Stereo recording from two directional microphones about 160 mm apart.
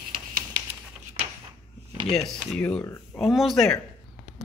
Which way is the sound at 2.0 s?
Centre (ahead or behind).